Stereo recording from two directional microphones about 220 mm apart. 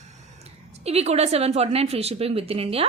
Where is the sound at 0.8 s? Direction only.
30° right (ahead or behind).